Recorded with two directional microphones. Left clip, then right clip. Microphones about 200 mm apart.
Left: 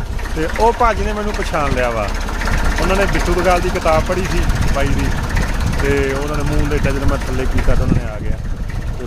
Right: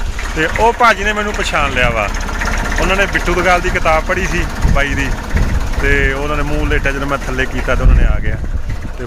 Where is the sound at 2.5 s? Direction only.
35° right (ahead or behind).